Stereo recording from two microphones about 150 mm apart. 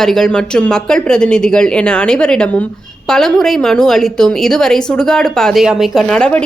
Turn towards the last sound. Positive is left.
turn(degrees=5)  # may be behind; listen again after turning